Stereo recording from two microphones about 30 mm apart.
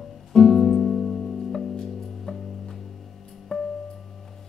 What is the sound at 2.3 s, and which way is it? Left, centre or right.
Music, left.